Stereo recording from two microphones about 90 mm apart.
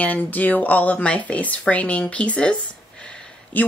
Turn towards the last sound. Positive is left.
turn(degrees=10)  # may be behind; listen again after turning